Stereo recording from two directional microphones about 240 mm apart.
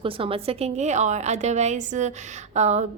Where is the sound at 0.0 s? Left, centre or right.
Right.